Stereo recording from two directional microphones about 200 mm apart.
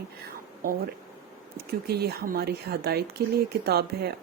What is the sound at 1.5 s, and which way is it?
Speech, 50° right (ahead or behind).